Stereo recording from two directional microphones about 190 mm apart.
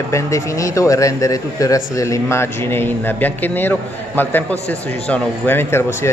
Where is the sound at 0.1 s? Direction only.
15° left (ahead or behind).